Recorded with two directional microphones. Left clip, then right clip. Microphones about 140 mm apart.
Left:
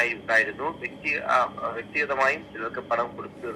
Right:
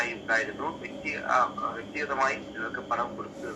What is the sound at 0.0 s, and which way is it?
A man's voice, 35° left (ahead or behind).